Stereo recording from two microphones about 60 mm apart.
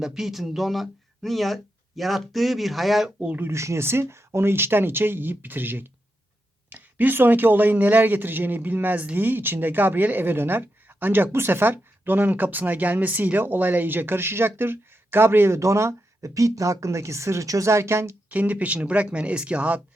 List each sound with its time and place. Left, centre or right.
0.0 s speech: centre
3.2 s speech: right
3.5 s speech: right
18.3 s speech: right